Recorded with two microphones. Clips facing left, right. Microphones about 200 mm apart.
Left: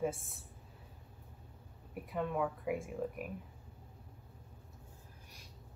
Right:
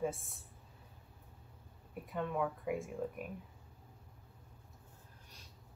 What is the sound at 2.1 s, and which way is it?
Speech, 5° left (ahead or behind).